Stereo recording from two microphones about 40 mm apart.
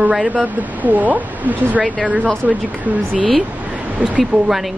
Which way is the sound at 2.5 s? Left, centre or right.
Right.